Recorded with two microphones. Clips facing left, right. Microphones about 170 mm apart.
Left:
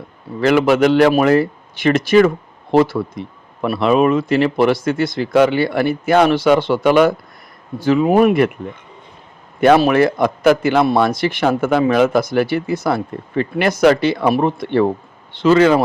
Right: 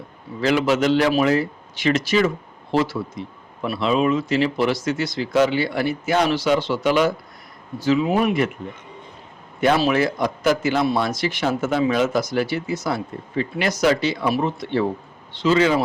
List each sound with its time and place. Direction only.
0.4 s a man's voice: 60° left (ahead or behind)
9.6 s a man's voice: 55° left (ahead or behind)